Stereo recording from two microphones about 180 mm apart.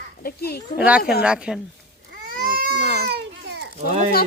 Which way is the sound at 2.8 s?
40° left (ahead or behind).